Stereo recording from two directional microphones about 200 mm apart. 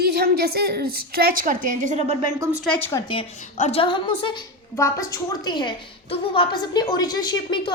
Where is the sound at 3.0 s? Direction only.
25° left (ahead or behind).